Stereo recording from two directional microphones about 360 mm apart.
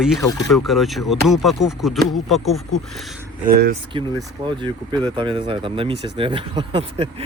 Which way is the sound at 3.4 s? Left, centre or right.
Right.